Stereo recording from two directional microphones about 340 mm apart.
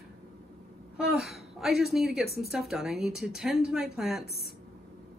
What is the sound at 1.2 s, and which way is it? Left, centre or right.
A woman's voice, centre.